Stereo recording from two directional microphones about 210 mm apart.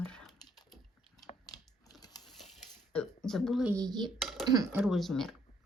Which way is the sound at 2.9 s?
5° left (ahead or behind).